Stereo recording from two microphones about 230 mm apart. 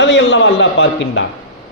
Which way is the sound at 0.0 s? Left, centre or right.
Left.